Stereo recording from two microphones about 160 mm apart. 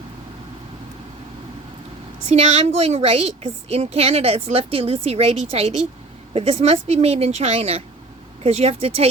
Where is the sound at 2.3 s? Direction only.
40° right (ahead or behind).